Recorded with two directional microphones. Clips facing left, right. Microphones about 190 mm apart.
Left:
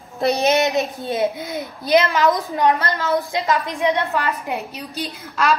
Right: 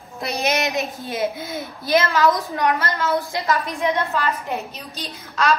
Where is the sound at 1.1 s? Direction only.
20° left (ahead or behind).